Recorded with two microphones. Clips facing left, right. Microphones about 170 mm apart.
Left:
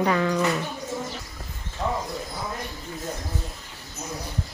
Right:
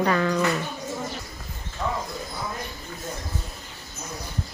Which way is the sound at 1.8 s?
20° left (ahead or behind).